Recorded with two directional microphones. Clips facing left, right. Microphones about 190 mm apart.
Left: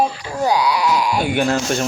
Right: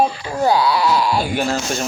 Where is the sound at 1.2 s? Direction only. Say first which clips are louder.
Left 2 dB; 60° left (ahead or behind).